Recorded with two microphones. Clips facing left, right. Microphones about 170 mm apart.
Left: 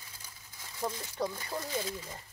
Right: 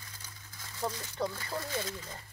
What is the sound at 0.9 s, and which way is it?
Speech, 15° left (ahead or behind).